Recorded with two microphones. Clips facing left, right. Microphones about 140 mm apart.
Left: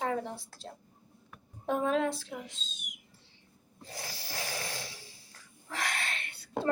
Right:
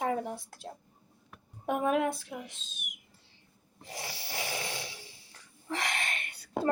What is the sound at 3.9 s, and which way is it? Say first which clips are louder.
Snoring: right 2 dB; 15° right (ahead or behind).